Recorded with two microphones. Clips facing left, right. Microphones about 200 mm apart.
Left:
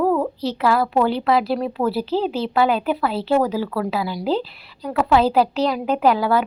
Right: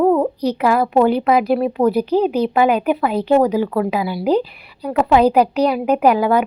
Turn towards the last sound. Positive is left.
turn(degrees=-15)  # may be behind; listen again after turning